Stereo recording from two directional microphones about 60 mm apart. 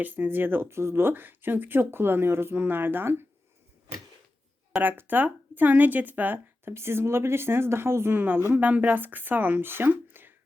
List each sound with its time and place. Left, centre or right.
0.0 s speech: right
4.8 s speech: right
6.7 s speech: right
8.4 s speech: right
10.1 s a sound: right